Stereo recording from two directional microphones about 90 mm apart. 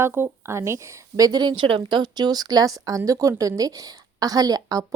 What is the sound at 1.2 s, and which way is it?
Speech, 50° right (ahead or behind).